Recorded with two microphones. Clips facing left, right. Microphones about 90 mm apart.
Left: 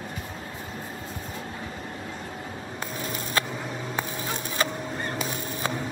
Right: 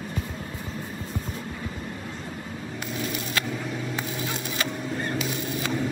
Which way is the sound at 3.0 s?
35° left (ahead or behind).